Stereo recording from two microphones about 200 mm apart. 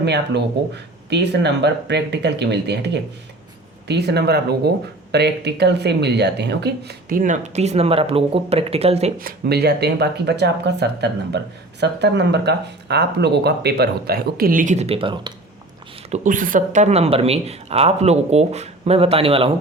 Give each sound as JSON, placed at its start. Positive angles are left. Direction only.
{"t": 0.0, "sound": "speech", "side_deg": -60}
{"t": 9.1, "sound": "speech", "side_deg": -50}
{"t": 16.0, "sound": "speech", "side_deg": -35}